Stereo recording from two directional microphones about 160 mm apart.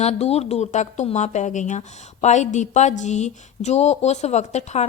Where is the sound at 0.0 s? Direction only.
40° left (ahead or behind).